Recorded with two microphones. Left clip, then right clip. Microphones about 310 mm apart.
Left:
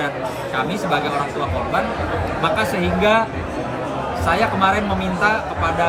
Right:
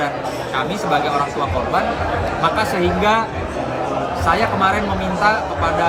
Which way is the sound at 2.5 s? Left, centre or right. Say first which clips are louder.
Right 2 dB; centre.